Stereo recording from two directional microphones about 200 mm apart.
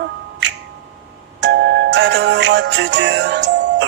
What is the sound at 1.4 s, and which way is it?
Music, 60° right (ahead or behind).